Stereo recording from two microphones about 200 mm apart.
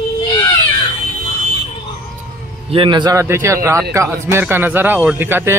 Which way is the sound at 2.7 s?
25° right (ahead or behind).